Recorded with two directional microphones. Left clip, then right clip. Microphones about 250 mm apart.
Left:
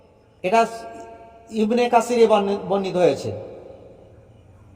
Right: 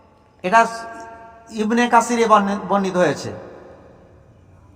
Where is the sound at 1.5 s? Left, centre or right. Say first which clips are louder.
Right 1 dB; centre.